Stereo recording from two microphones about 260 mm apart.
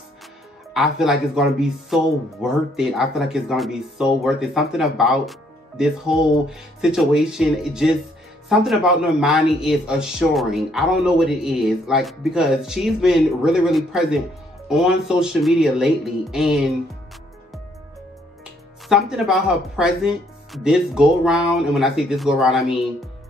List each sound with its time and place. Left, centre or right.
0.7 s speech: centre
18.9 s speech: centre